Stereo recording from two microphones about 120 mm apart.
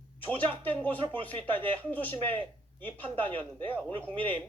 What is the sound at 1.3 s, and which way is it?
Speech, 45° right (ahead or behind).